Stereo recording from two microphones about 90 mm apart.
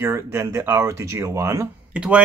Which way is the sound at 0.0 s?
30° right (ahead or behind).